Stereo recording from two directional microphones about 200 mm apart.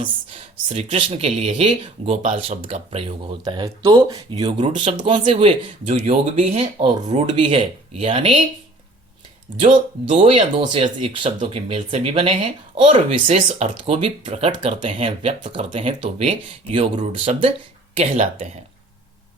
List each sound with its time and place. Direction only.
0.0 s speech: 30° right (ahead or behind)
10.1 s speech: 25° right (ahead or behind)